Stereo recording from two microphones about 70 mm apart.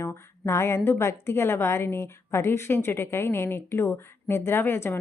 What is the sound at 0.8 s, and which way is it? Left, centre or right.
A woman's voice, left.